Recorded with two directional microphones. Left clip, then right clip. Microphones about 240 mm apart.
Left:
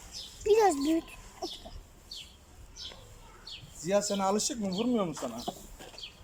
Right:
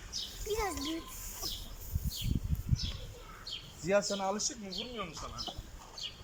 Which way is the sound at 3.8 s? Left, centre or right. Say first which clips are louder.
Left 3 dB; centre.